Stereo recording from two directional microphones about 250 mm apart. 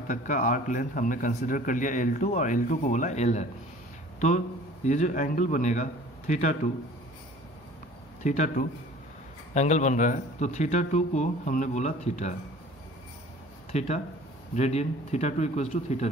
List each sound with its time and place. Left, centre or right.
0.1 s a man's voice: left
4.8 s speech: left
8.2 s speech: left
13.7 s speech: left